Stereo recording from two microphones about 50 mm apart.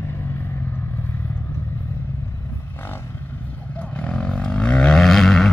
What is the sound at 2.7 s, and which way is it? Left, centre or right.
Vehicle, left.